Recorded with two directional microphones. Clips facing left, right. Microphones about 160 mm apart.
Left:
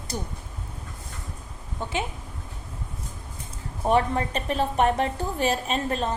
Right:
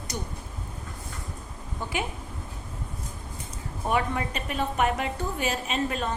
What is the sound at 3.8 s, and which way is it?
A woman's voice, 35° left (ahead or behind).